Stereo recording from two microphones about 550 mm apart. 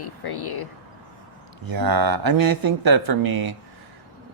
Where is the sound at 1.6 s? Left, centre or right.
Right.